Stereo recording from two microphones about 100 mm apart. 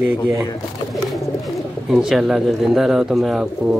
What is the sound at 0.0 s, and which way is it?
Speech, 20° right (ahead or behind).